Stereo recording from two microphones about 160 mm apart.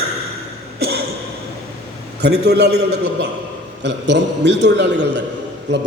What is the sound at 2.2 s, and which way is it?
A man's voice, 90° right.